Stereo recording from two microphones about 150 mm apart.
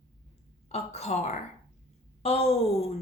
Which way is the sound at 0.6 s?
45° left (ahead or behind).